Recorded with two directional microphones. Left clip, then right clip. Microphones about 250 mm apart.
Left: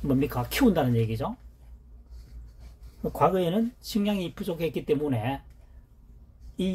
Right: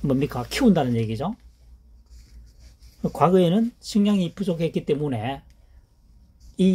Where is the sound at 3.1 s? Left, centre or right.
Right.